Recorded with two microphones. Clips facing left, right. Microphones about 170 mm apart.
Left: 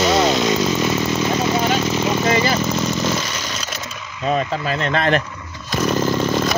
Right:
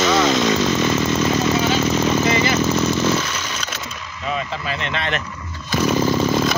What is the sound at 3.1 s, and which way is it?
Vehicle, 10° left (ahead or behind).